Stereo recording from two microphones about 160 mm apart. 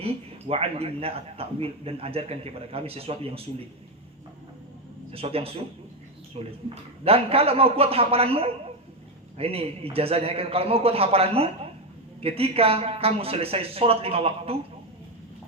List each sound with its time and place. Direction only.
0.0 s a man's voice: 35° right (ahead or behind)
5.1 s a man's voice: 35° right (ahead or behind)